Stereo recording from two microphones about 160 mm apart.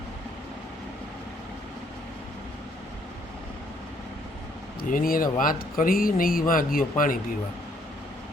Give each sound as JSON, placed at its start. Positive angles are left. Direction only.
{"t": 4.8, "sound": "speech", "side_deg": 60}